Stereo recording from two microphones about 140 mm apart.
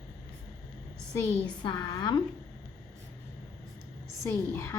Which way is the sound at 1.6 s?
35° left (ahead or behind).